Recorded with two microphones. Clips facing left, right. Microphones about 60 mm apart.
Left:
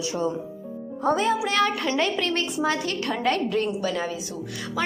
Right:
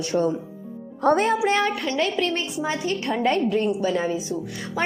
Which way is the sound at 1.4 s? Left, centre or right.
Right.